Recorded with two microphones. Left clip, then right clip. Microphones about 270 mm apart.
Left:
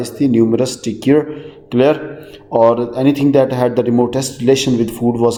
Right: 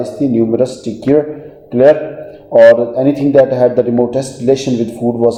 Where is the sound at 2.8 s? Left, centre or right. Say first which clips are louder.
Right 2 dB; left.